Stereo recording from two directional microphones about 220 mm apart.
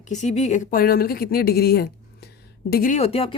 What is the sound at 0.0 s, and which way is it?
Speech, 35° left (ahead or behind).